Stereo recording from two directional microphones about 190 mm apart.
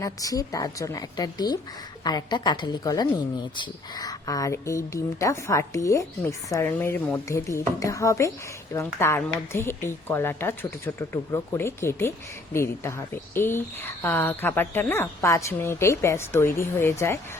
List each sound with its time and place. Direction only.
0.0 s a woman's voice: 20° left (ahead or behind)
13.3 s a woman's voice: 10° left (ahead or behind)